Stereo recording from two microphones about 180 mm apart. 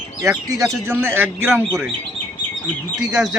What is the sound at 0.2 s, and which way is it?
Speech, 15° right (ahead or behind).